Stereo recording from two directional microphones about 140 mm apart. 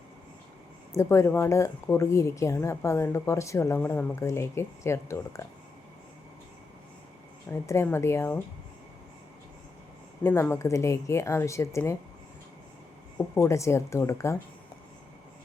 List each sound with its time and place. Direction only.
0.9 s speech: 20° left (ahead or behind)
7.5 s speech: 20° left (ahead or behind)
10.2 s speech: 20° left (ahead or behind)
13.1 s speech: 20° left (ahead or behind)